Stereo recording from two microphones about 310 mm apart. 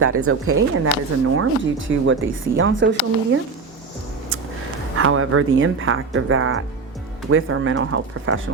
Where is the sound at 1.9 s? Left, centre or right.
Right.